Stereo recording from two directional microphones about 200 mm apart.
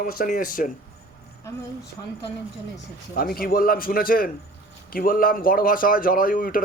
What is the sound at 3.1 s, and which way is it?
Speech, 45° left (ahead or behind).